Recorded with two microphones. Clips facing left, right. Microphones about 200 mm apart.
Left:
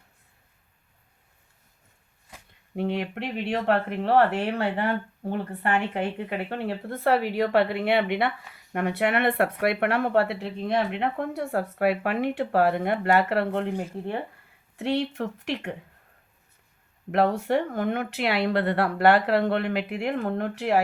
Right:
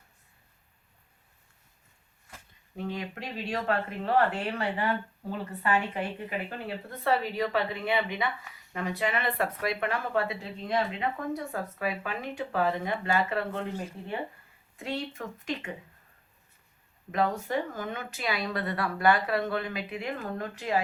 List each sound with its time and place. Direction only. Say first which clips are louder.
2.7 s speech: left 7 dB; 70° left (ahead or behind)
14.8 s speech: left 8 dB; 70° left (ahead or behind)
17.1 s speech: left 6 dB; 70° left (ahead or behind)